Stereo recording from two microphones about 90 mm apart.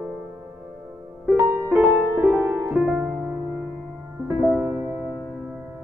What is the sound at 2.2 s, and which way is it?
Music, 15° right (ahead or behind).